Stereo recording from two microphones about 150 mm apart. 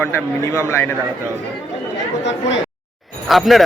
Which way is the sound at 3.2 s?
Centre (ahead or behind).